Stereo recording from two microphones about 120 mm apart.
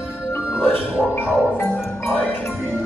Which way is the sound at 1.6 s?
20° left (ahead or behind).